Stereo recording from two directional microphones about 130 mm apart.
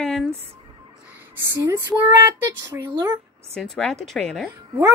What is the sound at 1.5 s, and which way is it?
Speech, 15° right (ahead or behind).